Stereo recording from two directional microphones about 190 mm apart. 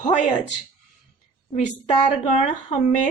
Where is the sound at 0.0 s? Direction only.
40° left (ahead or behind).